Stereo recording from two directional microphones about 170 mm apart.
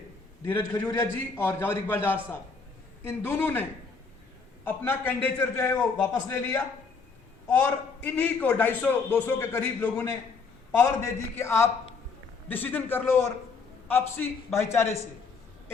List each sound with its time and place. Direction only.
0.4 s a man's voice: 15° left (ahead or behind)